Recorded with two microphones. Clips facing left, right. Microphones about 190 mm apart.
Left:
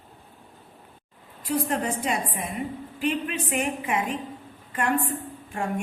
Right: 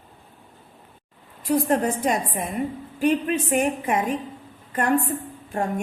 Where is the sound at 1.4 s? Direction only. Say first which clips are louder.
Right 5 dB; 45° right (ahead or behind).